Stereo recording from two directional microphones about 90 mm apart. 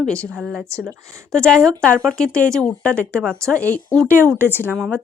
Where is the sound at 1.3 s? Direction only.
10° left (ahead or behind).